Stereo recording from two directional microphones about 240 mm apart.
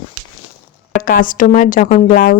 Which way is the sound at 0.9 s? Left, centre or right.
Left.